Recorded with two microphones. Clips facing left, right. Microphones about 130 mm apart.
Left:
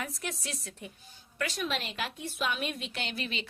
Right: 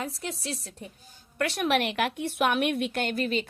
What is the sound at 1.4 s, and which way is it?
A woman's voice, 65° right (ahead or behind).